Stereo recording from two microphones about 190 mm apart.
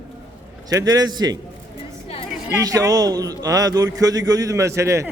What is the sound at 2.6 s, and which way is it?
A man's voice, 20° right (ahead or behind).